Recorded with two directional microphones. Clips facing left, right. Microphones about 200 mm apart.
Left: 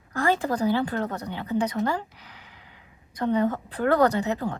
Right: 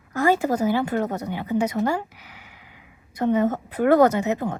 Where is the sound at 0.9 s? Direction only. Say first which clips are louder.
Right 4 dB; 15° right (ahead or behind).